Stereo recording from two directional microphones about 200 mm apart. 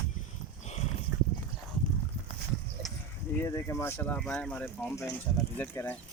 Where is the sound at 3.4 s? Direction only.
15° left (ahead or behind).